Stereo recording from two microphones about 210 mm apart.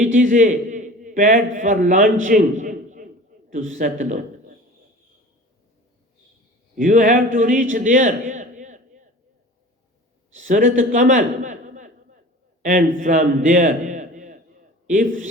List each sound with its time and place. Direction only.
0.0 s a man's voice: 40° right (ahead or behind)
2.2 s a sound: 40° right (ahead or behind)
3.5 s a man's voice: 35° right (ahead or behind)
6.7 s a man's voice: 40° right (ahead or behind)
10.3 s a man's voice: 40° right (ahead or behind)